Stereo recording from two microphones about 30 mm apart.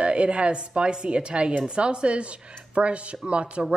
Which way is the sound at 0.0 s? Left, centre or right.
Right.